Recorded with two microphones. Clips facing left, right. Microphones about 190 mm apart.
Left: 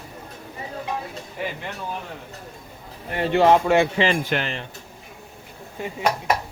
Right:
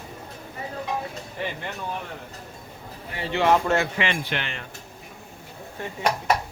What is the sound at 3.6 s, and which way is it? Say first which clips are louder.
Speech: left 5 dB; 15° left (ahead or behind).